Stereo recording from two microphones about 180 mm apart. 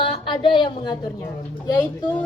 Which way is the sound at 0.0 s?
25° left (ahead or behind).